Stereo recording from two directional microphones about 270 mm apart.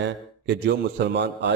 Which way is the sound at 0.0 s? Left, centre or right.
Right.